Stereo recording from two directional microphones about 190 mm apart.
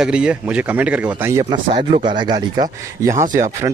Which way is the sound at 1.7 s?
35° right (ahead or behind).